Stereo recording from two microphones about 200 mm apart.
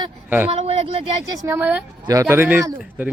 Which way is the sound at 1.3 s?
10° right (ahead or behind).